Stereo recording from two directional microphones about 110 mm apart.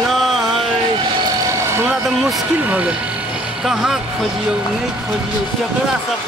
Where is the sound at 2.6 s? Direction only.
15° right (ahead or behind).